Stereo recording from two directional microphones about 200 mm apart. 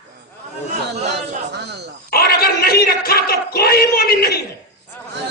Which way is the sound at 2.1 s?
50° left (ahead or behind).